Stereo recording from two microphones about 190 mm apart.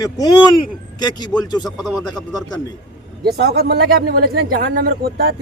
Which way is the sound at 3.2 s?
55° right (ahead or behind).